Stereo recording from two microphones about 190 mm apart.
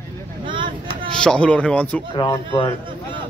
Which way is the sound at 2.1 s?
20° left (ahead or behind).